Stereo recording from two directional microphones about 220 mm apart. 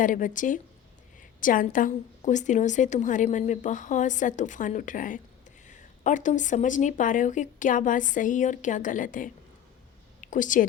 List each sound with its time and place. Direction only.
0.0 s a woman's voice: 35° left (ahead or behind)